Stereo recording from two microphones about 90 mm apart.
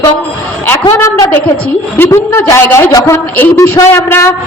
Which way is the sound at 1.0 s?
35° left (ahead or behind).